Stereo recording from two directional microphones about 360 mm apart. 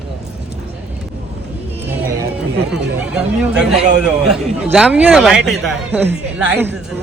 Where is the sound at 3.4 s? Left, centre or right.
Centre.